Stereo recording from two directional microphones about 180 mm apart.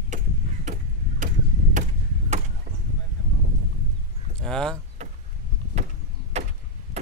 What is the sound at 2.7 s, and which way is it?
Arrow, 30° right (ahead or behind).